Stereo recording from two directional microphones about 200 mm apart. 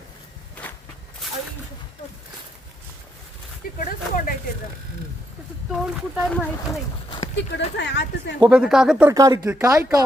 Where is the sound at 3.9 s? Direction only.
45° left (ahead or behind).